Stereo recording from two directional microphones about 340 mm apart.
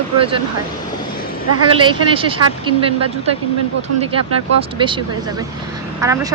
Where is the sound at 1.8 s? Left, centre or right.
Centre.